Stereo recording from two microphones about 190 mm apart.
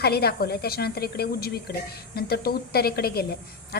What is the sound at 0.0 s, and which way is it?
A woman's voice, 55° left (ahead or behind).